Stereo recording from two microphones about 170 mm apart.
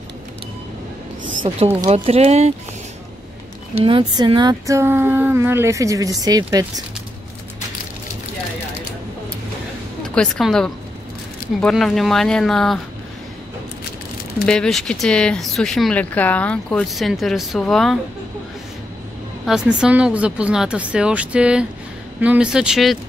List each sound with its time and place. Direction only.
1.2 s speech: 30° right (ahead or behind)
3.8 s speech: 30° right (ahead or behind)
10.0 s speech: 5° left (ahead or behind)
14.4 s speech: 5° left (ahead or behind)
19.4 s speech: 5° right (ahead or behind)